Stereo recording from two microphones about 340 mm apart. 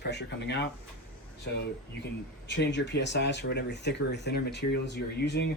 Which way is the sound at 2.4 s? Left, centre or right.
Left.